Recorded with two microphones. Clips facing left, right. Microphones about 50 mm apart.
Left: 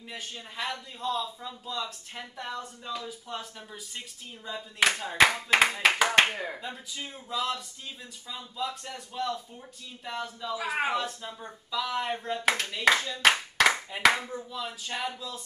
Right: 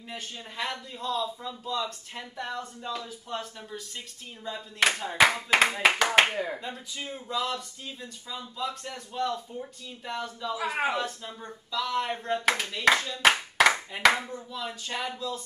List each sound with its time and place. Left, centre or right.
0.1 s a man's voice: centre
4.5 s a man's voice: centre